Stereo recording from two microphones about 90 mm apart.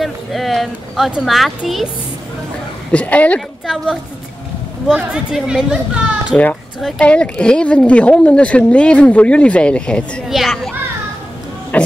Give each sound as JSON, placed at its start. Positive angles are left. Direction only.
{"t": 0.0, "sound": "a sound", "side_deg": 0}
{"t": 1.2, "sound": "a child's voice", "side_deg": 0}
{"t": 2.9, "sound": "speech", "side_deg": 15}
{"t": 3.3, "sound": "a child's voice", "side_deg": 0}
{"t": 6.3, "sound": "a child's voice", "side_deg": 5}
{"t": 10.2, "sound": "a child's voice", "side_deg": 0}
{"t": 11.7, "sound": "a sound", "side_deg": 15}